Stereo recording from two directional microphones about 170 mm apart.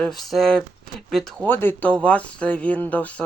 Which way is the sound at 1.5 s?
10° left (ahead or behind).